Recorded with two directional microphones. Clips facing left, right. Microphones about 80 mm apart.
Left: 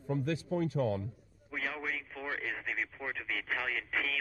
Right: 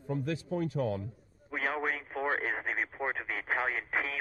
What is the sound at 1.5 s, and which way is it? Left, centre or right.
Speech, right.